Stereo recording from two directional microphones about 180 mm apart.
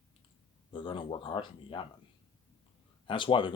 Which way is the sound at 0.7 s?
30° left (ahead or behind).